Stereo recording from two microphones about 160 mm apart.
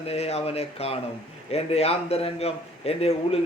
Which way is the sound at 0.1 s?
40° left (ahead or behind).